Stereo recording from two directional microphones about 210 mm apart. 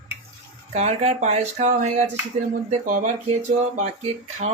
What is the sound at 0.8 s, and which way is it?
Speech, 30° right (ahead or behind).